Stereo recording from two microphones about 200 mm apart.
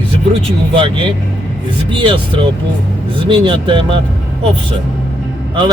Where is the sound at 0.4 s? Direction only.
25° right (ahead or behind).